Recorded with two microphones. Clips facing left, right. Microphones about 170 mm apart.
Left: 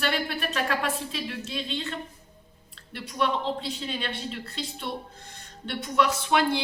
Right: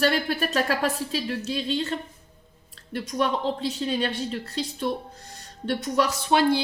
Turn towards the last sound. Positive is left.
turn(degrees=-35)  # may be behind; listen again after turning